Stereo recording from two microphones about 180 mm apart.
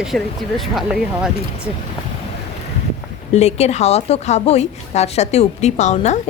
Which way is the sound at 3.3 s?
35° left (ahead or behind).